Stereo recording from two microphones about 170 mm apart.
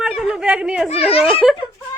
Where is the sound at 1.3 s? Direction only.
5° right (ahead or behind).